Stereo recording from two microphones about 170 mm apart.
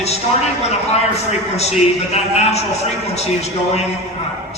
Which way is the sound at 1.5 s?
40° left (ahead or behind).